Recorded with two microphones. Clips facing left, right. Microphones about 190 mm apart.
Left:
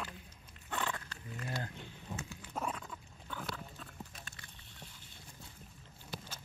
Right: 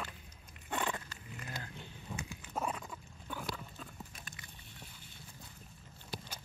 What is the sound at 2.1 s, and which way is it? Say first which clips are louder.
Dog: right 2 dB; 10° right (ahead or behind).